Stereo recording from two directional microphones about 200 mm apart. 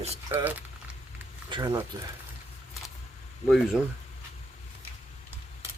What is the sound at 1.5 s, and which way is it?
Speech, 25° right (ahead or behind).